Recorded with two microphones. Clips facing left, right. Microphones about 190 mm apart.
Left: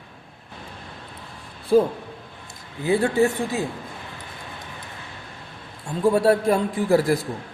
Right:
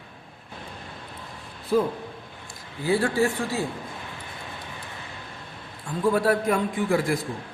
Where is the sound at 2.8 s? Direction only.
20° left (ahead or behind).